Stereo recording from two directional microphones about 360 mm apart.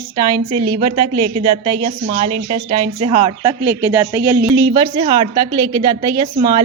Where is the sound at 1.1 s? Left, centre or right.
Right.